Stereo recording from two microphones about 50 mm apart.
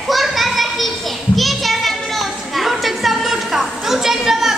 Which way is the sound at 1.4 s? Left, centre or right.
Centre.